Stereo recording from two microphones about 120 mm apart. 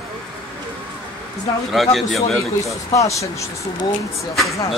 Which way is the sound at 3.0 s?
25° left (ahead or behind).